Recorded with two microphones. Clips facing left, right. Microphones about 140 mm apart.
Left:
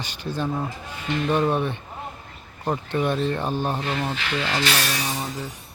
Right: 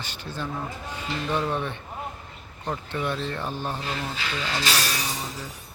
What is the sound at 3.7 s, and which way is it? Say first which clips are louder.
Speech: left 5 dB; 40° left (ahead or behind).